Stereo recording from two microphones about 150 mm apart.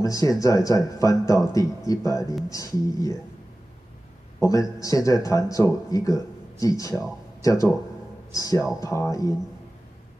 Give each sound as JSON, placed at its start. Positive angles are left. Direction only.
{"t": 0.0, "sound": "a man's voice", "side_deg": 25}
{"t": 4.4, "sound": "a man's voice", "side_deg": 20}